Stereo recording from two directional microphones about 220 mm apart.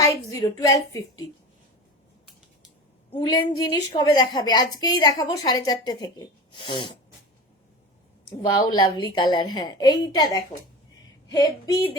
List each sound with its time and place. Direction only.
0.0 s a woman's voice: 15° left (ahead or behind)
3.2 s a woman's voice: 20° left (ahead or behind)
8.4 s a woman's voice: 20° left (ahead or behind)